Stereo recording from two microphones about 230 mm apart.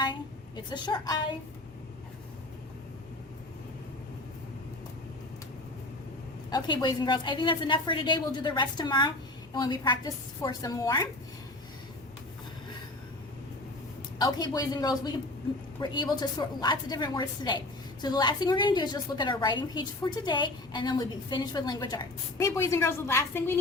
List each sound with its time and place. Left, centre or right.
0.0 s a woman's voice: centre
6.5 s a woman's voice: centre
14.2 s a woman's voice: centre